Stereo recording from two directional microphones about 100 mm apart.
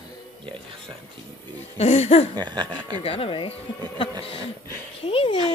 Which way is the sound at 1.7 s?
90° left.